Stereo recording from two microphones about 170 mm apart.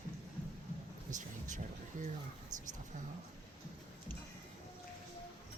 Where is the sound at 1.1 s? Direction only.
45° right (ahead or behind).